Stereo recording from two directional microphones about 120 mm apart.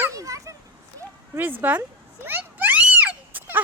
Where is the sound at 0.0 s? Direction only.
25° right (ahead or behind).